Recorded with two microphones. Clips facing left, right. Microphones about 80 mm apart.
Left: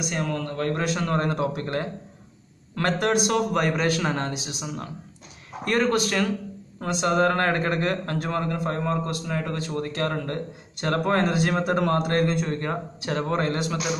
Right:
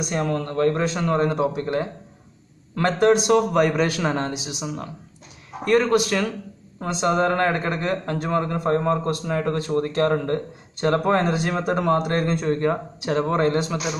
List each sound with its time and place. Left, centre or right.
0.0 s a man's voice: right; by 4.6 s centre
5.8 s speech: centre
6.8 s a man's voice: right
12.6 s a man's voice: centre